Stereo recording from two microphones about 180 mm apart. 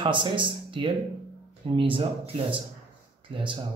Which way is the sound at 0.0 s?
25° right (ahead or behind).